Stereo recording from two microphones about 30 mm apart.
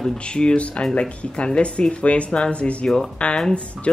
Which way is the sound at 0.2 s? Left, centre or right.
Left.